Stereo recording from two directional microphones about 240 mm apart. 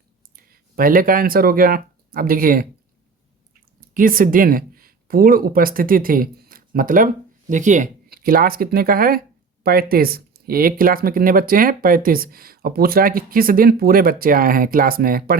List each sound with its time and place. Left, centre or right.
0.3 s speech: right
3.8 s speech: right